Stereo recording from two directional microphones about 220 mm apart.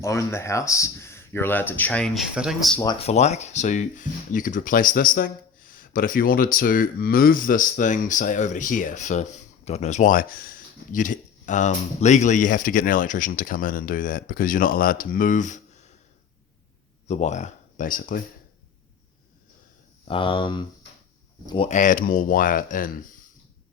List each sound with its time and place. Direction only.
0.0 s speech: 15° left (ahead or behind)
2.8 s speech: 25° left (ahead or behind)
17.1 s speech: 30° left (ahead or behind)
20.1 s speech: 25° left (ahead or behind)
21.7 s speech: 35° left (ahead or behind)